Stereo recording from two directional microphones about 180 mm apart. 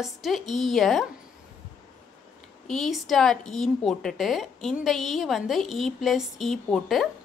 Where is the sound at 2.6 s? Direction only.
Centre (ahead or behind).